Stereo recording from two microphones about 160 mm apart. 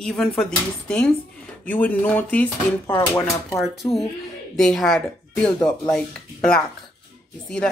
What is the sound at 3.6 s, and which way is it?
Speech, centre (ahead or behind).